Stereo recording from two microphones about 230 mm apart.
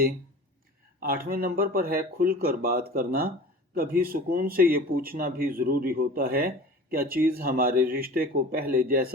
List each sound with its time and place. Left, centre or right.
0.9 s speech: right